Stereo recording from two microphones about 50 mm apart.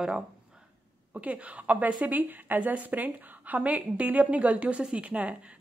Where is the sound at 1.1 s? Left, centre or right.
Right.